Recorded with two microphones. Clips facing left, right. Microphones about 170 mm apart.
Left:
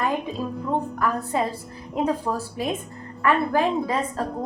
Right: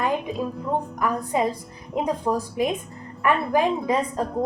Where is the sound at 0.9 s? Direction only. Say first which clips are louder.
Right 1 dB; 15° right (ahead or behind).